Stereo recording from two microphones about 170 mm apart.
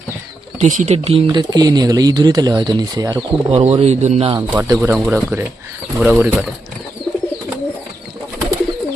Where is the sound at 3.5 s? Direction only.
40° right (ahead or behind).